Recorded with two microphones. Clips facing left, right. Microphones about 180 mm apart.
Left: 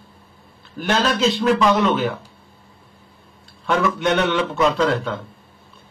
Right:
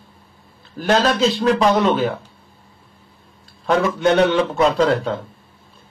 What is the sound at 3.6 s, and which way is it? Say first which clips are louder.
A man's voice: right 3 dB; 35° right (ahead or behind).